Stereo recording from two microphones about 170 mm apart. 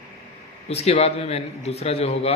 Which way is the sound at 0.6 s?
35° left (ahead or behind).